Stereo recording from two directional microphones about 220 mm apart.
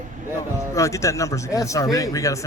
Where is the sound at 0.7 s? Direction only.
15° left (ahead or behind).